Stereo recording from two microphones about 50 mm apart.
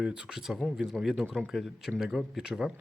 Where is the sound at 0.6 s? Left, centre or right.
Centre.